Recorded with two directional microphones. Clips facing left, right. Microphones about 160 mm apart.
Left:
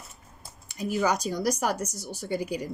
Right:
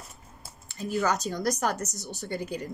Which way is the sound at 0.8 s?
15° left (ahead or behind).